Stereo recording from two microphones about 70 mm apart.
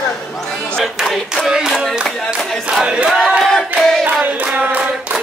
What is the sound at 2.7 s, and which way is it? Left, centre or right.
Battle cry, centre.